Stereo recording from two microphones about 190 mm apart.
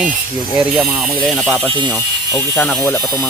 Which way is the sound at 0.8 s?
Centre (ahead or behind).